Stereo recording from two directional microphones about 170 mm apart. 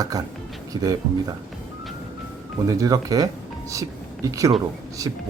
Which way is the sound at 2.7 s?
20° right (ahead or behind).